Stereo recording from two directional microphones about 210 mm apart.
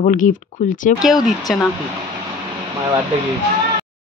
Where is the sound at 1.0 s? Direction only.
Centre (ahead or behind).